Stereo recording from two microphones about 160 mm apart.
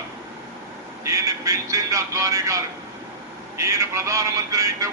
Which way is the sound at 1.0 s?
20° right (ahead or behind).